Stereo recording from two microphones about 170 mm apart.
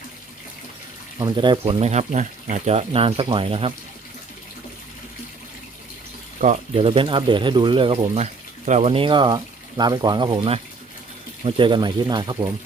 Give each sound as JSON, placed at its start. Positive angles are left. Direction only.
{"t": 1.2, "sound": "speech", "side_deg": -25}
{"t": 6.4, "sound": "speech", "side_deg": -45}
{"t": 6.8, "sound": "speech", "side_deg": -30}